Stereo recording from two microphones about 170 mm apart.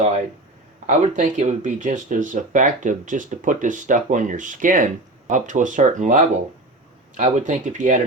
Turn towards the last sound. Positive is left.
turn(degrees=-50)  # may be behind; listen again after turning